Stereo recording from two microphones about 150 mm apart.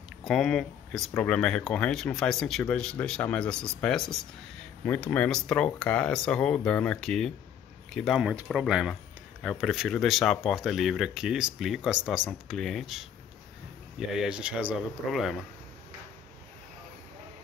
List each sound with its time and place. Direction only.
0.2 s speech: 5° left (ahead or behind)